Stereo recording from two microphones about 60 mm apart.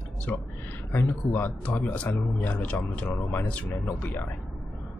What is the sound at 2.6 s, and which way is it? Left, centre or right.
Speech, left.